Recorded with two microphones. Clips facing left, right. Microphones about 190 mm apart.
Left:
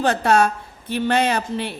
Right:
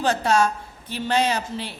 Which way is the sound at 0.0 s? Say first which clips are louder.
Left 3 dB; 60° left (ahead or behind).